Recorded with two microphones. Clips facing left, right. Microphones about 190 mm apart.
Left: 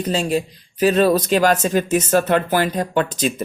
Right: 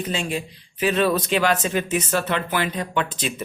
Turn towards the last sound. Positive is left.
turn(degrees=40)  # may be behind; listen again after turning